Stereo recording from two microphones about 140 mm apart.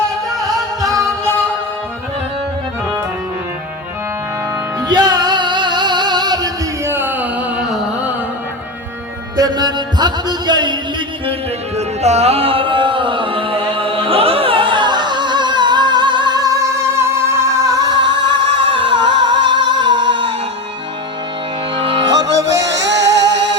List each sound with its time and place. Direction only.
0.3 s music: centre (ahead or behind)
4.9 s music: 30° right (ahead or behind)
6.9 s a sound: 15° right (ahead or behind)
9.3 s music: 30° right (ahead or behind)
12.0 s music: 50° right (ahead or behind)
21.8 s music: 35° right (ahead or behind)